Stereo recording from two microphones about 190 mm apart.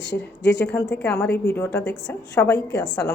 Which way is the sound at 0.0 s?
65° left (ahead or behind).